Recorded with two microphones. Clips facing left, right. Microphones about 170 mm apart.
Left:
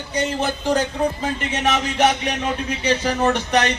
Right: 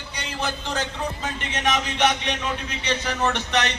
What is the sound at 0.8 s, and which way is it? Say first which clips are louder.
Speech: left 7 dB; 10° left (ahead or behind).